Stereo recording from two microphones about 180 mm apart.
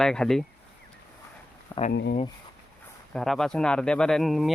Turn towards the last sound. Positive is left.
turn(degrees=0)  # may be behind; listen again after turning